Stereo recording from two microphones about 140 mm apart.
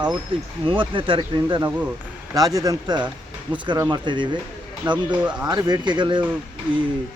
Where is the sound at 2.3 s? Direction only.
25° right (ahead or behind).